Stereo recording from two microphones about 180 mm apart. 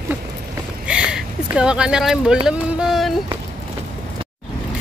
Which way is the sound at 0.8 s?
5° right (ahead or behind).